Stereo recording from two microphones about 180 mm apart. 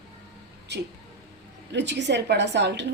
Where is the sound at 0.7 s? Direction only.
70° right (ahead or behind).